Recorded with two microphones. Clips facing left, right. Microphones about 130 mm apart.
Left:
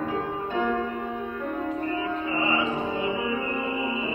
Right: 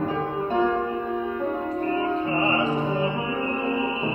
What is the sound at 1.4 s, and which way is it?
Music, 35° right (ahead or behind).